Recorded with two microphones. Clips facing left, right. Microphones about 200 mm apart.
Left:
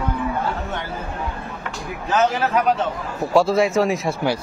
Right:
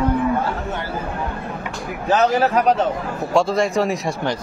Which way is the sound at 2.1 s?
35° right (ahead or behind).